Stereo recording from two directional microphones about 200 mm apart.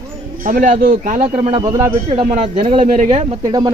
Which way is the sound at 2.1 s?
25° right (ahead or behind).